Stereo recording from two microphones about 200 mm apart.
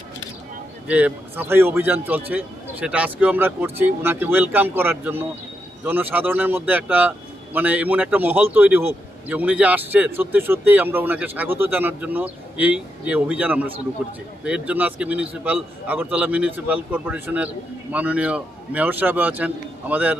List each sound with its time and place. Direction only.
0.8 s a man's voice: 5° right (ahead or behind)